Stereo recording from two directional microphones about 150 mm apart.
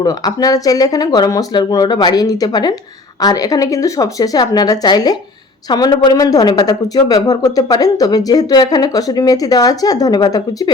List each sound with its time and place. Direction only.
0.0 s speech: 25° left (ahead or behind)